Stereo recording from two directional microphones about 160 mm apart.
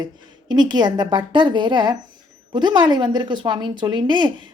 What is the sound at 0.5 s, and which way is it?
Speech, 30° right (ahead or behind).